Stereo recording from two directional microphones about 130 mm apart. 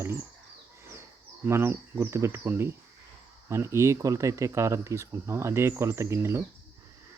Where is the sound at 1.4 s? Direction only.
20° right (ahead or behind).